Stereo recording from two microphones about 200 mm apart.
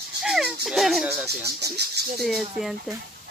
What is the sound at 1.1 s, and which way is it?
Speech, 15° right (ahead or behind).